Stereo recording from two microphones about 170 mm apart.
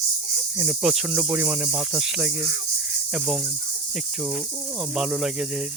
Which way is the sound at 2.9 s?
5° right (ahead or behind).